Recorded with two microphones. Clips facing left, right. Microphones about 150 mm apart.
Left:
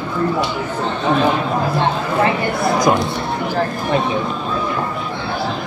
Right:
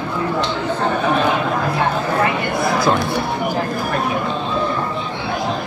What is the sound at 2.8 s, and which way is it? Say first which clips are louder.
Speech: left 3 dB; 15° left (ahead or behind).